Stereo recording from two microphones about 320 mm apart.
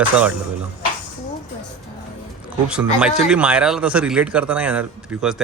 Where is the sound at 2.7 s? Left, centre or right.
Centre.